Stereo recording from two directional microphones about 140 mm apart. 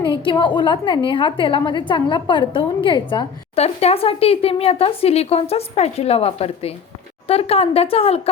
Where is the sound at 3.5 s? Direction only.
50° left (ahead or behind).